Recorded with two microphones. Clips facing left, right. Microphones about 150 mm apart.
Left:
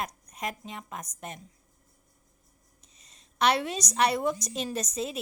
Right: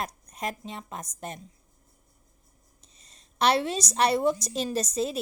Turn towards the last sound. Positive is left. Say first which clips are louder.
# right 4 dB
turn(degrees=-35)  # may be behind; listen again after turning